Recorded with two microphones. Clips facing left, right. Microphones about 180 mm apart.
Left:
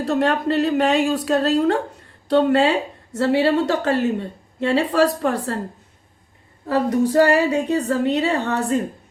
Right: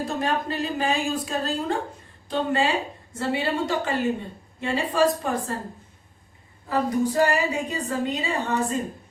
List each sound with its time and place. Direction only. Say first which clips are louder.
0.0 s a woman's voice: left 7 dB; 70° left (ahead or behind)
6.7 s a woman's voice: left 5 dB; 70° left (ahead or behind)